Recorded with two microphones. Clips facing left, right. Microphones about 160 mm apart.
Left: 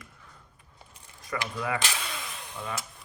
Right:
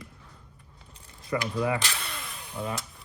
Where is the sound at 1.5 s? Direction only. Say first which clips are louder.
Right 4 dB; 30° right (ahead or behind).